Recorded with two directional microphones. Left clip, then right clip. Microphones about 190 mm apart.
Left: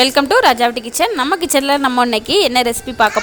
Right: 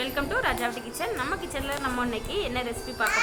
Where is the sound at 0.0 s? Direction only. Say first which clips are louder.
Left 16 dB; 70° left (ahead or behind).